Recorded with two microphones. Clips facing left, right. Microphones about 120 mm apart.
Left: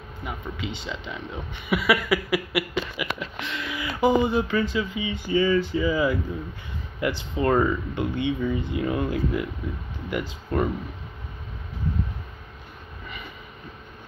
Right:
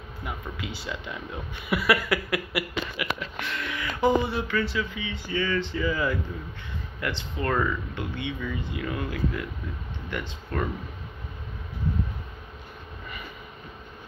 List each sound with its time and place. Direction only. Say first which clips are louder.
0.2 s speech: left 2 dB; centre (ahead or behind)
3.8 s speech: left 2 dB; 10° left (ahead or behind)
8.4 s speech: left 6 dB; 25° left (ahead or behind)
10.5 s speech: left 5 dB; 20° left (ahead or behind)